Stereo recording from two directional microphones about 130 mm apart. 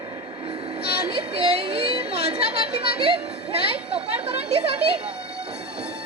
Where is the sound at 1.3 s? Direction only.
45° right (ahead or behind).